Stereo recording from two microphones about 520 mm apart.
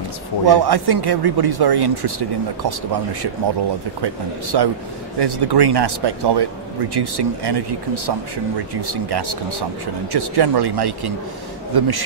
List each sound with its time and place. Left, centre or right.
0.5 s speech: right